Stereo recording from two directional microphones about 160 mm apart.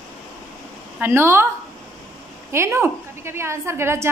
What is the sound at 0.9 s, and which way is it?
Speech, 15° right (ahead or behind).